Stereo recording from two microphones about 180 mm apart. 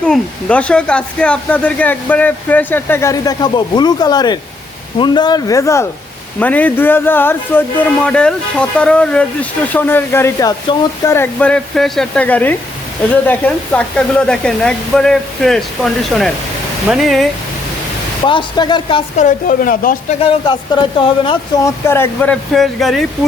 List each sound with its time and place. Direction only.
0.0 s speech: 5° left (ahead or behind)
18.3 s speech: 25° left (ahead or behind)
19.1 s speech: 45° left (ahead or behind)
20.1 s speech: 30° left (ahead or behind)
21.8 s speech: 15° left (ahead or behind)